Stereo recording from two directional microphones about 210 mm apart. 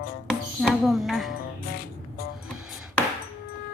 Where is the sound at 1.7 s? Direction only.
45° left (ahead or behind).